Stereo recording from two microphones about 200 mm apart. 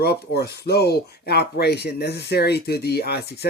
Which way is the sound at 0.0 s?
50° left (ahead or behind).